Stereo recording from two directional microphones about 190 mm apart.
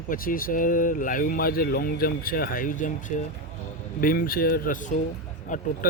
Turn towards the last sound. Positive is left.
turn(degrees=45)  # may be behind; listen again after turning